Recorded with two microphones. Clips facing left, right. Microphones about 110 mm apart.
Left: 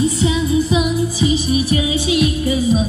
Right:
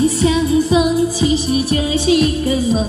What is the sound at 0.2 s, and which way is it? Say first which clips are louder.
Music: right 3 dB; 40° right (ahead or behind).